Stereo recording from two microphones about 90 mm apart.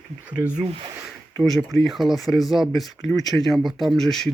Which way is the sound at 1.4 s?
Centre (ahead or behind).